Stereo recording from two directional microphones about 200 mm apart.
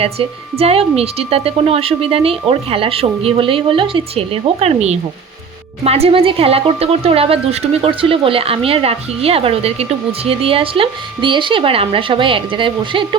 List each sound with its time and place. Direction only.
0.0 s a woman's voice: 30° right (ahead or behind)